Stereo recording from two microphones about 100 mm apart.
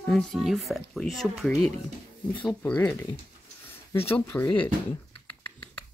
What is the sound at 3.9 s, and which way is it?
Speech, 25° left (ahead or behind).